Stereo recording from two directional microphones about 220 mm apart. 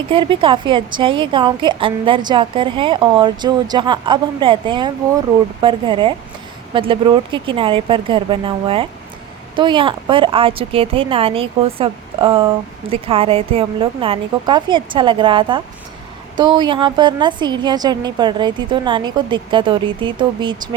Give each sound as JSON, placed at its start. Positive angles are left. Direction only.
{"t": 0.1, "sound": "a woman's voice", "side_deg": -25}